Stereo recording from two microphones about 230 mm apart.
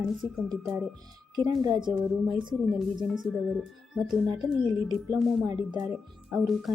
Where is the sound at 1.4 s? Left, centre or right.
Centre.